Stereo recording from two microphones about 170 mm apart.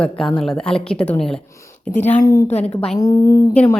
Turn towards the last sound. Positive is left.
turn(degrees=10)  # may be behind; listen again after turning